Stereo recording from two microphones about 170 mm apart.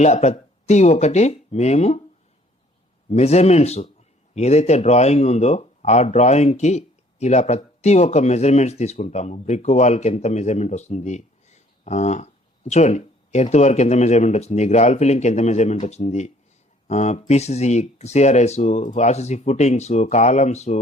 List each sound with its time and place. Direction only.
0.0 s speech: 40° left (ahead or behind)
3.1 s speech: 40° left (ahead or behind)